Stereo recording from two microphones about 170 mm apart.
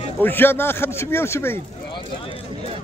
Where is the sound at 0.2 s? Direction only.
10° left (ahead or behind).